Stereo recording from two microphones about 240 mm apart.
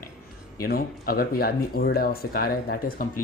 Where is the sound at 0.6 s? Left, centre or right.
Left.